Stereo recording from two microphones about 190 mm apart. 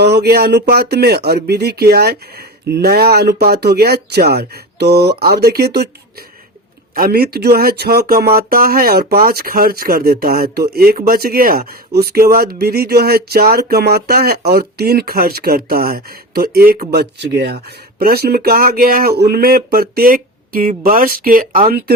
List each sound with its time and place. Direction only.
0.0 s speech: 60° right (ahead or behind)